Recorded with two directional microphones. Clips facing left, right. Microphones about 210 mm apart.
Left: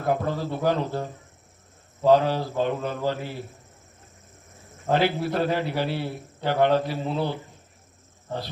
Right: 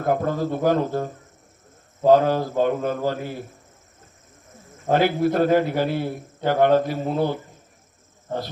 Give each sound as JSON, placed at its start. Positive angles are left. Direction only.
{"t": 0.0, "sound": "a man's voice", "side_deg": -45}
{"t": 4.9, "sound": "a man's voice", "side_deg": -45}